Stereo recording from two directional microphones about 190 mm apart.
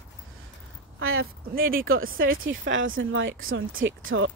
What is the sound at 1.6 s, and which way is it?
Speech, 50° right (ahead or behind).